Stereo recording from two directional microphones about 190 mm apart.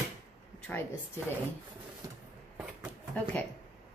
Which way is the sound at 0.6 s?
10° left (ahead or behind).